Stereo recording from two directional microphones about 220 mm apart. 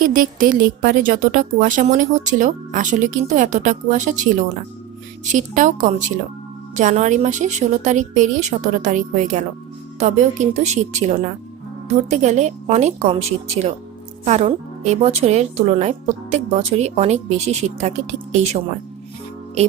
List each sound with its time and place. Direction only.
0.0 s a woman's voice: 40° right (ahead or behind)
14.3 s a woman's voice: 30° right (ahead or behind)